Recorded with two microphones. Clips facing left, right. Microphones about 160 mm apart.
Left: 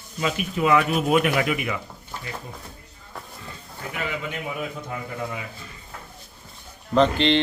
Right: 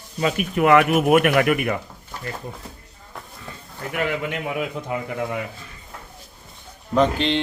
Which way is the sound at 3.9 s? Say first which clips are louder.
Right 6 dB; 60° right (ahead or behind).